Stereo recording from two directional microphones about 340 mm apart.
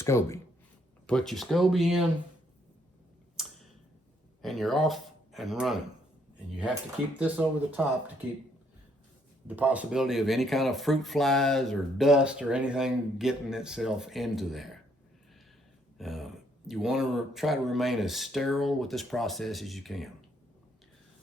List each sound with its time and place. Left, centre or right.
0.0 s speech: centre
3.4 s clicking: centre
4.4 s speech: centre
7.2 s speech: centre
9.5 s speech: centre
16.0 s speech: centre